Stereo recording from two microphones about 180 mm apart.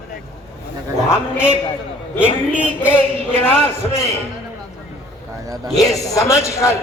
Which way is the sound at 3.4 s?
10° left (ahead or behind).